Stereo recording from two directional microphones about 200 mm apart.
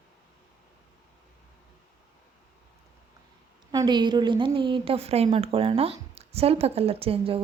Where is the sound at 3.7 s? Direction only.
20° right (ahead or behind).